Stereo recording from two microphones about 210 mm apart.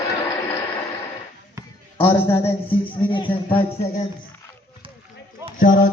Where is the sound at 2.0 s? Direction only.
10° left (ahead or behind).